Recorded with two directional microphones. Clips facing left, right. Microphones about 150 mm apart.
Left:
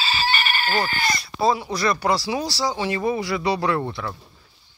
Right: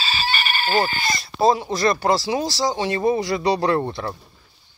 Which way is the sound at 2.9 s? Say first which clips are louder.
Right 3 dB; 40° right (ahead or behind).